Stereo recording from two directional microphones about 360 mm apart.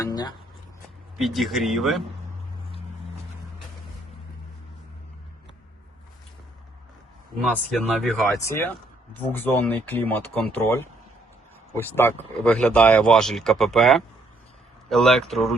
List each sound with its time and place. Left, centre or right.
0.0 s a sound: centre
1.2 s speech: centre
7.3 s speech: centre